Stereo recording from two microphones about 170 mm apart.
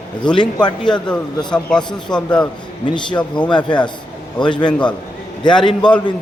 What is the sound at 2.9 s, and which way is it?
Speech, 25° left (ahead or behind).